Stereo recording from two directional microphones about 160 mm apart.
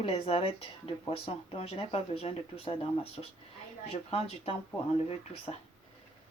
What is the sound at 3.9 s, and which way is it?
Speech, 40° left (ahead or behind).